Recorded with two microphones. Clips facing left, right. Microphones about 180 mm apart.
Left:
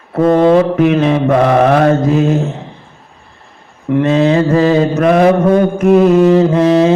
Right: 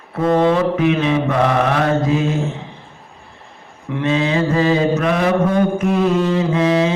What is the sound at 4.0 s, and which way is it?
Mantra, 45° left (ahead or behind).